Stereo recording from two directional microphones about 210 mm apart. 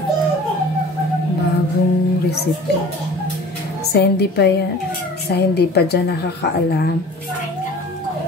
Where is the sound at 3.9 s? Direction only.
50° left (ahead or behind).